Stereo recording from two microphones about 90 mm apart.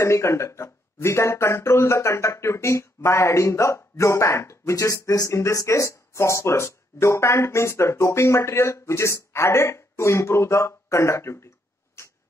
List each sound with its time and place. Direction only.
0.0 s speech: 30° left (ahead or behind)